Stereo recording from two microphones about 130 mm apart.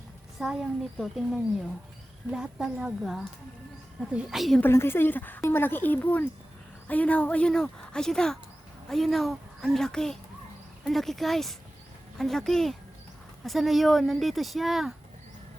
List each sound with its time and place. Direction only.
0.4 s speech: centre (ahead or behind)
4.6 s speech: 20° left (ahead or behind); by 14.9 s centre (ahead or behind)